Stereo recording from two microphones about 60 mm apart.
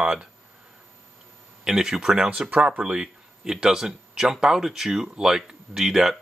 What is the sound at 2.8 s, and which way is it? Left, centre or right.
Speech, centre.